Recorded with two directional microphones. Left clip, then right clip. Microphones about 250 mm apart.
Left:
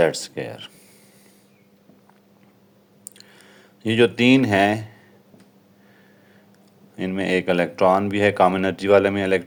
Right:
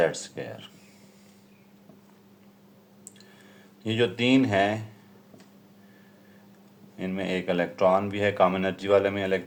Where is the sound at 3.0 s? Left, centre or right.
Left.